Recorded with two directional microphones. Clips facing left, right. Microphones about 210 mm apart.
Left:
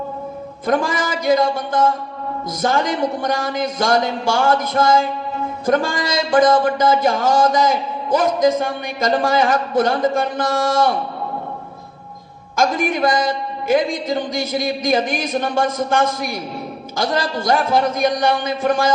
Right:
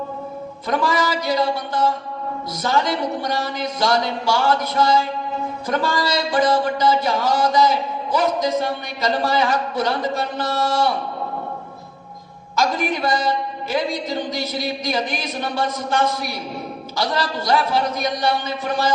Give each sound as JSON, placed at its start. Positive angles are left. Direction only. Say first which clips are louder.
{"t": 0.7, "sound": "speech", "louder": "left 1 dB", "side_deg": 50}
{"t": 12.5, "sound": "speech", "louder": "left 3 dB", "side_deg": 50}